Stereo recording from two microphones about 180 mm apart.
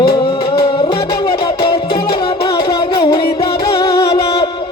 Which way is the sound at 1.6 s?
65° left (ahead or behind).